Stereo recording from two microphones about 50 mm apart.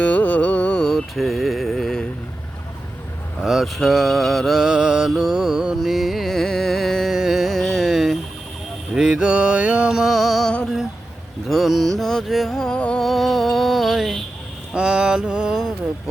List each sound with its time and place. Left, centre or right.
0.0 s carnatic music: left
0.8 s mantra: centre
3.4 s music: centre
4.5 s music: centre
7.1 s music: centre
9.0 s music: centre
10.1 s music: centre
12.7 s music: left
13.0 s music: centre
14.7 s mantra: centre